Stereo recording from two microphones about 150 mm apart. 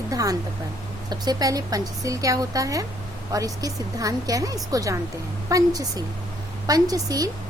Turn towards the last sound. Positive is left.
turn(degrees=-25)  # may be behind; listen again after turning